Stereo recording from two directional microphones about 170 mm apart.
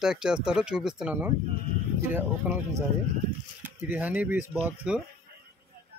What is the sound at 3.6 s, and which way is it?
Speech, 10° right (ahead or behind).